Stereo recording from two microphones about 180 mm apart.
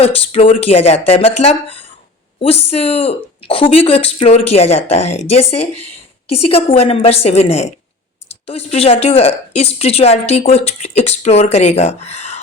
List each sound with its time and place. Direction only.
0.0 s speech: 35° left (ahead or behind)